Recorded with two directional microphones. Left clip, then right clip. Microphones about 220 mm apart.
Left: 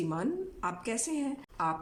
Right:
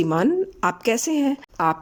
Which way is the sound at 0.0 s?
35° right (ahead or behind).